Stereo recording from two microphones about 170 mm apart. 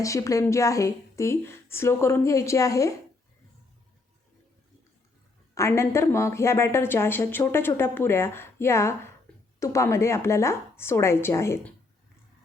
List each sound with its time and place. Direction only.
0.0 s speech: 20° left (ahead or behind)
5.5 s speech: 15° left (ahead or behind)